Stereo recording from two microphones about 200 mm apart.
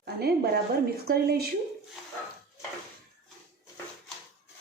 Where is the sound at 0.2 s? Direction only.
50° right (ahead or behind).